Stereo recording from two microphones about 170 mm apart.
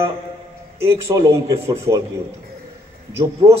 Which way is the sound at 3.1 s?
15° right (ahead or behind).